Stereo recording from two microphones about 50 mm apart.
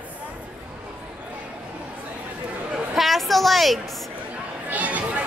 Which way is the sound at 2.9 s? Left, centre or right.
Centre.